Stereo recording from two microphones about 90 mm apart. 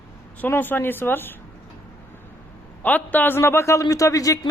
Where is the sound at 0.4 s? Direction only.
20° left (ahead or behind).